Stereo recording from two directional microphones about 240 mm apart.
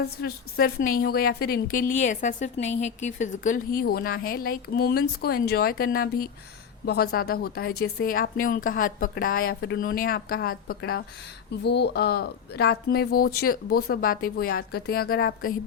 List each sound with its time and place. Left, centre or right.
0.0 s a woman's voice: left